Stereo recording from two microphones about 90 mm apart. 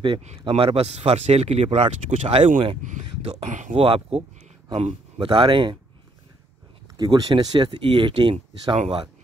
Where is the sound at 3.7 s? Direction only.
90° right.